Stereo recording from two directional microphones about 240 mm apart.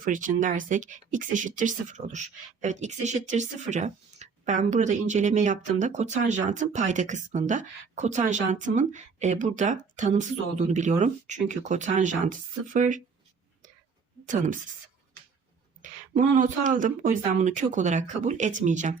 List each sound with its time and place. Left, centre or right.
0.0 s speech: right
14.3 s speech: right
15.8 s speech: right